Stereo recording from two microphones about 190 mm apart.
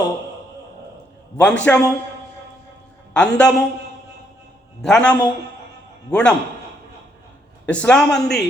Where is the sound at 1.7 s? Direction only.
10° left (ahead or behind).